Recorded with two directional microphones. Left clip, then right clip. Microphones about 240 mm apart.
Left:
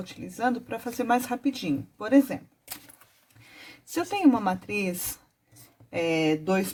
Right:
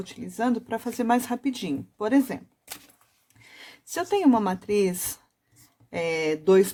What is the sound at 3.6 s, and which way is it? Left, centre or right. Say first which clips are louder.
Speech: right 3 dB; right.